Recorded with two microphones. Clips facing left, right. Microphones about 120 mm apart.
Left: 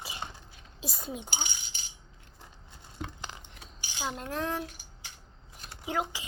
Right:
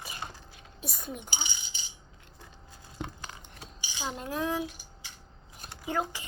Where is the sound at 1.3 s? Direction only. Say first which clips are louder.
Left 1 dB; 55° left (ahead or behind).